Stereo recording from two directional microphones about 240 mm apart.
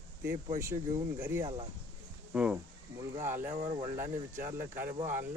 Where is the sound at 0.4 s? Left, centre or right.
Centre.